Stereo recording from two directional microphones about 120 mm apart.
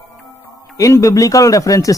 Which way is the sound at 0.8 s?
25° left (ahead or behind).